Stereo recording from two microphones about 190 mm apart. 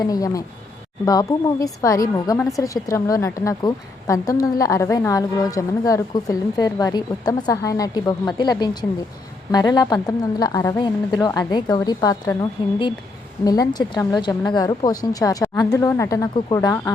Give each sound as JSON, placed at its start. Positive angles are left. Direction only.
{"t": 0.0, "sound": "a woman's voice", "side_deg": 20}